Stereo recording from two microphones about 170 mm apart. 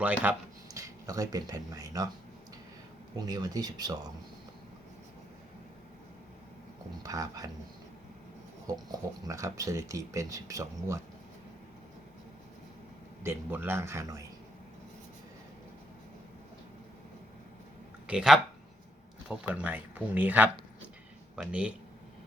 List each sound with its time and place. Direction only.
0.0 s speech: 10° right (ahead or behind)
3.2 s speech: 20° right (ahead or behind)
7.0 s speech: 20° right (ahead or behind)
9.2 s speech: 20° right (ahead or behind)
13.2 s speech: 15° right (ahead or behind)
18.0 s speech: 5° right (ahead or behind)